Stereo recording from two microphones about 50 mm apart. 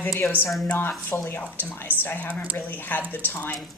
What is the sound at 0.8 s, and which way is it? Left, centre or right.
Speech, left.